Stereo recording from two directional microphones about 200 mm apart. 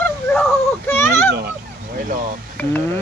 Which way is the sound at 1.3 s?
60° right (ahead or behind).